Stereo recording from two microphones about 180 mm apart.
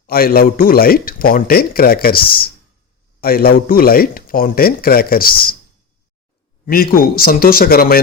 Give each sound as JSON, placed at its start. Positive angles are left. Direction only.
{"t": 0.1, "sound": "a man's voice", "side_deg": 55}
{"t": 6.7, "sound": "a man's voice", "side_deg": 55}